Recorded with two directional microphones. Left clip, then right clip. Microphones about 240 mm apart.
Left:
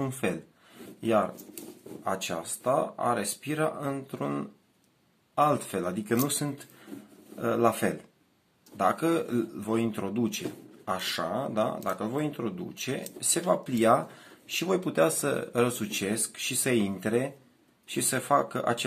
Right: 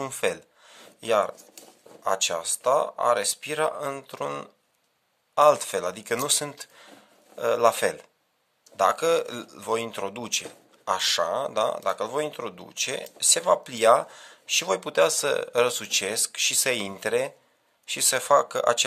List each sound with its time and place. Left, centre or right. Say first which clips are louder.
0.0 s speech: right 4 dB; right